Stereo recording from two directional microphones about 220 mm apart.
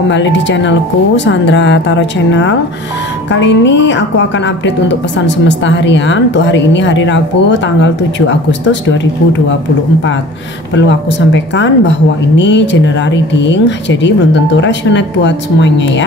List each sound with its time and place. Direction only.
0.1 s a woman's voice: 55° left (ahead or behind)
10.7 s a woman's voice: 55° left (ahead or behind)